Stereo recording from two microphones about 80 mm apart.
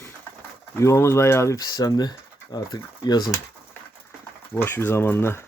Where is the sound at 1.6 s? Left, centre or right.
Left.